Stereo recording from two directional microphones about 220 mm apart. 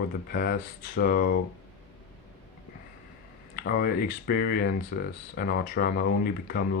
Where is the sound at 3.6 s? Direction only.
45° left (ahead or behind).